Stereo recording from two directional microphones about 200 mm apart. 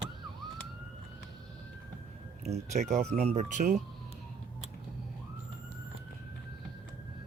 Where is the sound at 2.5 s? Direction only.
35° right (ahead or behind).